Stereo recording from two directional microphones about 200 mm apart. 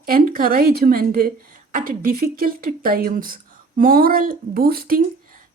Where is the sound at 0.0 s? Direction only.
45° right (ahead or behind).